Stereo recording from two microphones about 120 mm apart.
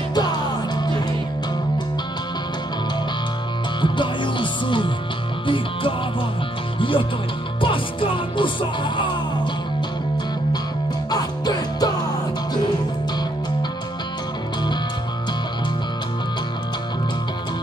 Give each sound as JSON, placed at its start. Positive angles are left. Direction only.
{"t": 0.1, "sound": "music", "side_deg": 35}
{"t": 3.8, "sound": "music", "side_deg": 40}
{"t": 6.8, "sound": "music", "side_deg": 45}
{"t": 11.1, "sound": "music", "side_deg": 35}